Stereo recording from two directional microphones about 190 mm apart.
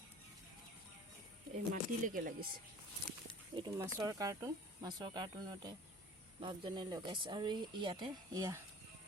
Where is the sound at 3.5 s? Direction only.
20° right (ahead or behind).